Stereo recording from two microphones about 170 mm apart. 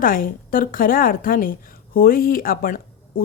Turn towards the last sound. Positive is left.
turn(degrees=60)  # may be behind; listen again after turning